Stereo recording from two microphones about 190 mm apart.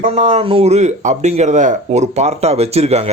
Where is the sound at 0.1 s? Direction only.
35° right (ahead or behind).